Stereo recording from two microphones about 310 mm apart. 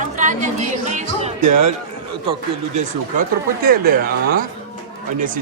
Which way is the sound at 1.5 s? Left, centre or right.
Right.